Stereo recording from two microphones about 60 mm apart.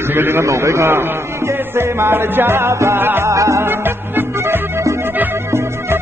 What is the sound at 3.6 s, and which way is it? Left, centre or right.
Music, right.